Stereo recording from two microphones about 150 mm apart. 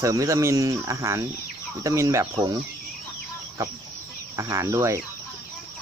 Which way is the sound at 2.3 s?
30° right (ahead or behind).